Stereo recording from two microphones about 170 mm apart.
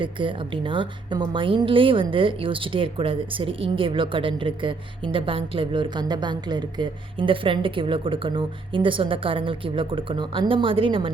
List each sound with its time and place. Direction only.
0.0 s a woman's voice: 30° right (ahead or behind)